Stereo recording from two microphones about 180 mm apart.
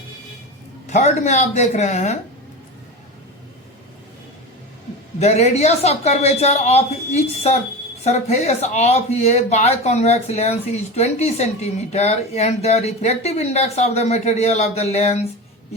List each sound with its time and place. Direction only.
0.9 s speech: 40° left (ahead or behind)
5.2 s speech: 35° left (ahead or behind)